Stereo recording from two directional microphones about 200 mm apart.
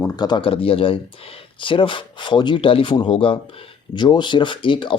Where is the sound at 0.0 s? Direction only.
20° left (ahead or behind).